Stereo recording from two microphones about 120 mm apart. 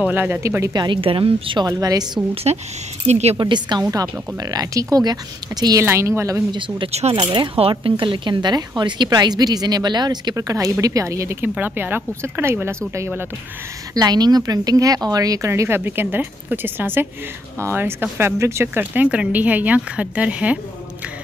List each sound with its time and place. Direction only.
0.0 s speech: 15° right (ahead or behind)
0.7 s a woman's voice: 45° right (ahead or behind)
1.7 s speech: 30° right (ahead or behind)
2.3 s speech: 60° right (ahead or behind)
3.3 s a woman's voice: 40° right (ahead or behind); by 6.4 s 25° right (ahead or behind)
6.9 s speech: 60° right (ahead or behind)
7.2 s a woman's voice: 45° right (ahead or behind); by 13.2 s 20° right (ahead or behind)
13.9 s speech: 35° right (ahead or behind); by 20.5 s 10° right (ahead or behind)